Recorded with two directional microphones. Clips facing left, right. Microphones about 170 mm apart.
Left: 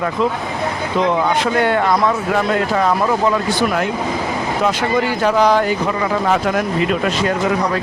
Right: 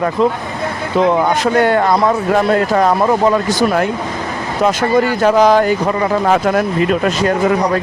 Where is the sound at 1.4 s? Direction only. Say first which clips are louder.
Right 3 dB; 45° right (ahead or behind).